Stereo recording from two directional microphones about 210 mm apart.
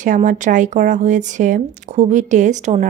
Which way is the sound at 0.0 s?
35° right (ahead or behind).